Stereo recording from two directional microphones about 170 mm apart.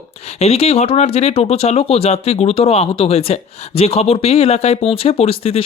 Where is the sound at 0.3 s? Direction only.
35° left (ahead or behind).